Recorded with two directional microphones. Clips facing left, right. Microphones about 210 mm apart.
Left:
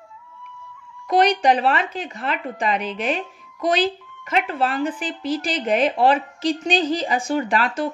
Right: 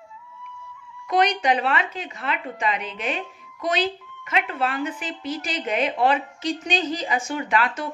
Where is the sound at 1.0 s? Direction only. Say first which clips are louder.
Left 4 dB; 40° left (ahead or behind).